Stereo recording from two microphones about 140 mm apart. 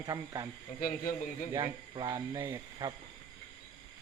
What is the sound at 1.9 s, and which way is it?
Speech, 35° right (ahead or behind).